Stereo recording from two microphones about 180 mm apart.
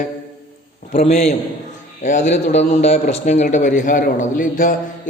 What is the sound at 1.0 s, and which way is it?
A man's voice, 35° left (ahead or behind).